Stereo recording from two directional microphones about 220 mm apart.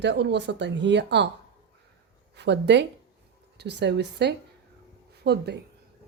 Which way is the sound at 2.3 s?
50° right (ahead or behind).